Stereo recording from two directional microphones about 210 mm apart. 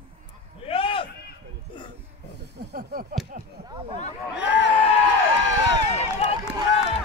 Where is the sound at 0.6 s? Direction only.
25° left (ahead or behind).